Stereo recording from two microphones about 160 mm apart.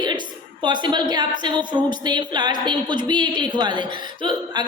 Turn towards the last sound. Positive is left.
turn(degrees=-30)  # may be behind; listen again after turning